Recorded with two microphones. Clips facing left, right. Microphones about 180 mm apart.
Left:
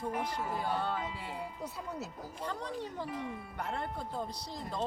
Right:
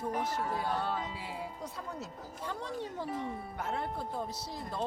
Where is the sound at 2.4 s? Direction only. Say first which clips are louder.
Even; 10° right (ahead or behind).